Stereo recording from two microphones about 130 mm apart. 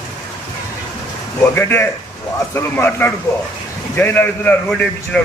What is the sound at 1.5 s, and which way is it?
A man's voice, 15° left (ahead or behind).